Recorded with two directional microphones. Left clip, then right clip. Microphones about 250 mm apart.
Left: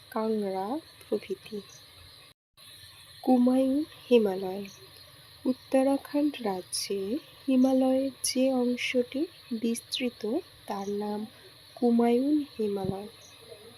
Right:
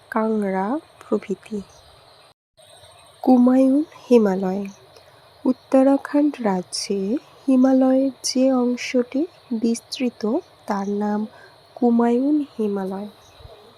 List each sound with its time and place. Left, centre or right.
0.1 s speech: right
3.2 s speech: right